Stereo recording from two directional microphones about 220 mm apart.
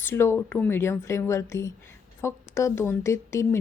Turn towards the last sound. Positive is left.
turn(degrees=10)  # may be behind; listen again after turning